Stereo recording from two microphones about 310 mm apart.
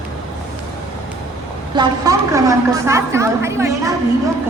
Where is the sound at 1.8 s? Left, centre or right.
Centre.